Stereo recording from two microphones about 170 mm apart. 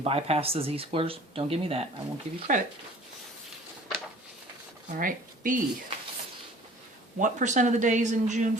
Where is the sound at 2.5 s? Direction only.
50° right (ahead or behind).